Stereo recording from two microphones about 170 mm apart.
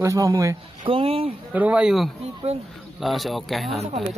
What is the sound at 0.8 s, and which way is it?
Speech, 35° right (ahead or behind).